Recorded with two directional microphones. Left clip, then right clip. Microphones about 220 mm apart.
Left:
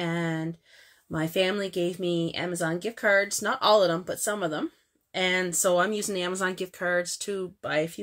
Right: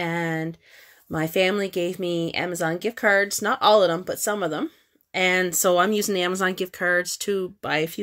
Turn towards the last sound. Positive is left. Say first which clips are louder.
# right 3 dB
turn(degrees=-45)  # may be behind; listen again after turning